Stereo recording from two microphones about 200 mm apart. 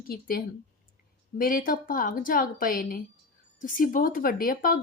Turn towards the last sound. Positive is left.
turn(degrees=45)  # may be behind; listen again after turning